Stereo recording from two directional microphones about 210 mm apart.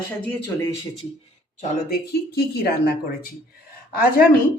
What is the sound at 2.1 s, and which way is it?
Speech, 50° left (ahead or behind).